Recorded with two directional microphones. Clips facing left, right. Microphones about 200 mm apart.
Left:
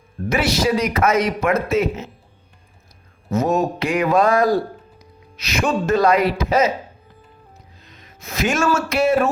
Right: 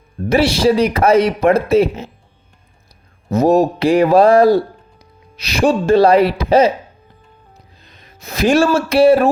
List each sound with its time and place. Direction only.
0.3 s a man's voice: 30° right (ahead or behind)
3.2 s a man's voice: 35° right (ahead or behind)
7.8 s speech: 30° right (ahead or behind)